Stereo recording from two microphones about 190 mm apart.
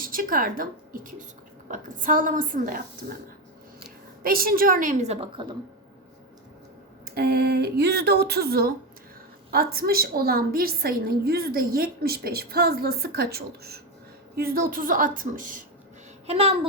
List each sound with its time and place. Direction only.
0.0 s a woman's voice: 50° right (ahead or behind)
4.2 s a woman's voice: 50° right (ahead or behind); by 5.5 s 30° right (ahead or behind)
7.0 s a woman's voice: 55° right (ahead or behind)
16.2 s a woman's voice: 30° right (ahead or behind)